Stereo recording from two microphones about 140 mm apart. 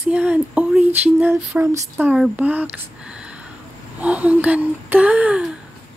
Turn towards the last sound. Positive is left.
turn(degrees=-10)  # may be behind; listen again after turning